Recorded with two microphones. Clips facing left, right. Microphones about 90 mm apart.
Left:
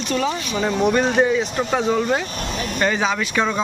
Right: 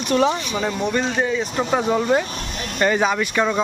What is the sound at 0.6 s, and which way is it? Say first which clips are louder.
Speech: left 6 dB; 5° left (ahead or behind).